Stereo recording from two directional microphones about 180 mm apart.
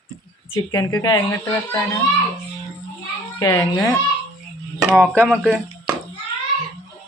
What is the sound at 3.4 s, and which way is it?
Speech, 15° left (ahead or behind).